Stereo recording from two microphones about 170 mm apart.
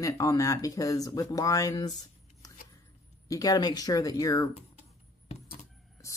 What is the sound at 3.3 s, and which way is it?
Speech, 20° left (ahead or behind).